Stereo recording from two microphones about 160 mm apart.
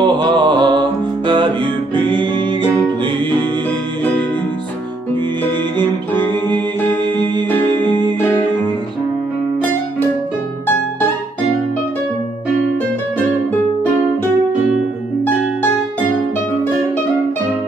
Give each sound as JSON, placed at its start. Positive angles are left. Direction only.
{"t": 0.0, "sound": "music", "side_deg": -30}
{"t": 7.5, "sound": "music", "side_deg": 10}